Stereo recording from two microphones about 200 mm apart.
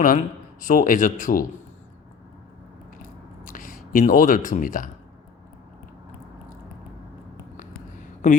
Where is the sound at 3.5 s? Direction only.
45° left (ahead or behind).